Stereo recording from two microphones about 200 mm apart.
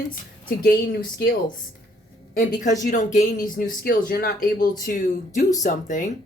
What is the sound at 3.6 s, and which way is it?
Speech, 50° left (ahead or behind).